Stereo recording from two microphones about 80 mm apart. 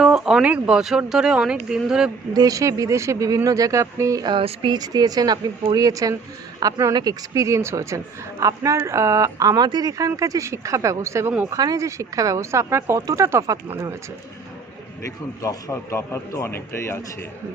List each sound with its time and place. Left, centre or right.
0.0 s a sound: centre
0.7 s speech: centre
2.3 s speech: right
4.2 s a sound: right
4.8 s a woman's voice: right
11.5 s a woman's voice: right
15.0 s a man's voice: left